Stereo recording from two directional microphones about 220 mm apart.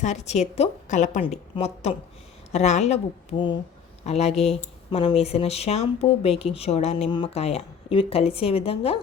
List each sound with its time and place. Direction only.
0.0 s a woman's voice: 30° left (ahead or behind)